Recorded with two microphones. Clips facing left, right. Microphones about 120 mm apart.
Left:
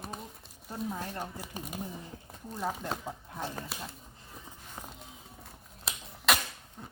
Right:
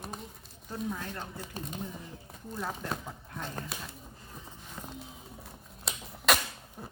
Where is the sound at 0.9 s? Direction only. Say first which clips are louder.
Even; 30° left (ahead or behind).